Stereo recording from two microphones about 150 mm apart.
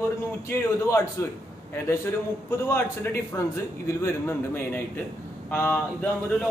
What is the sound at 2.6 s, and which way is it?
A man's voice, 15° left (ahead or behind).